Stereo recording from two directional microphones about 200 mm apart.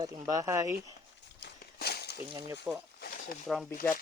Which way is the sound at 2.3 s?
20° right (ahead or behind).